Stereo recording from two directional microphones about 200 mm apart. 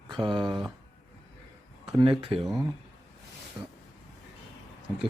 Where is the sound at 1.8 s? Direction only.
25° right (ahead or behind).